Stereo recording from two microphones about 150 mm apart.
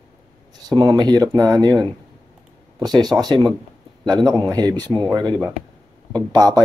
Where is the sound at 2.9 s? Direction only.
30° right (ahead or behind).